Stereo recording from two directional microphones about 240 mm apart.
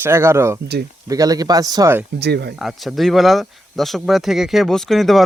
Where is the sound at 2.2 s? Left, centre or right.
Right.